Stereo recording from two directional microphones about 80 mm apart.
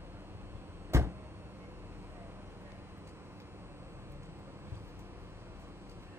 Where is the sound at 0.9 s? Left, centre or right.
Right.